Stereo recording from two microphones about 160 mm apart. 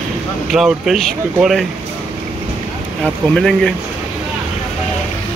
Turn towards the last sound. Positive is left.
turn(degrees=5)  # may be behind; listen again after turning